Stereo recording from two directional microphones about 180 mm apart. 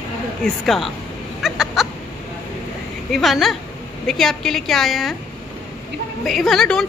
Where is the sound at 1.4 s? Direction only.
Centre (ahead or behind).